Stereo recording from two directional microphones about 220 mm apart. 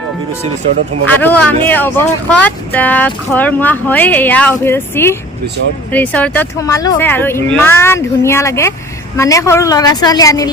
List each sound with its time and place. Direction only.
1.2 s speech: 5° left (ahead or behind)